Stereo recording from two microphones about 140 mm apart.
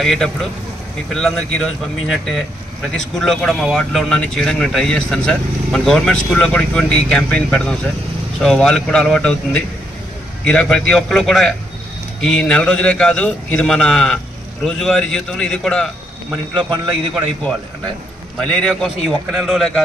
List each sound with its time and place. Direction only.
0.0 s speech: 5° left (ahead or behind)
10.4 s speech: 5° left (ahead or behind)
16.7 s a man's voice: 35° right (ahead or behind)
18.4 s speech: 5° left (ahead or behind)